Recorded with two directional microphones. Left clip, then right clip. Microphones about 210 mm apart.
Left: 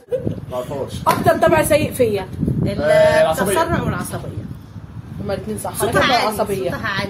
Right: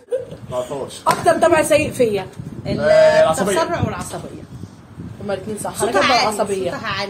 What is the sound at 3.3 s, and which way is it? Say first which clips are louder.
Speech: even; 20° left (ahead or behind).